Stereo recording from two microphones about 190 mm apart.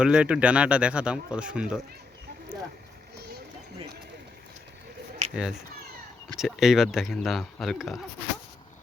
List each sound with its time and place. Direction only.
0.0 s speech: 5° right (ahead or behind)
5.3 s speech: 5° right (ahead or behind)